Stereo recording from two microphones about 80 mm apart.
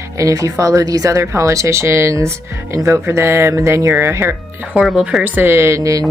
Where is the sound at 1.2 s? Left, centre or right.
Right.